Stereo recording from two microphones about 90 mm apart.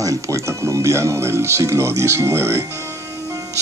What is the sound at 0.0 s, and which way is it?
Speech, 35° right (ahead or behind).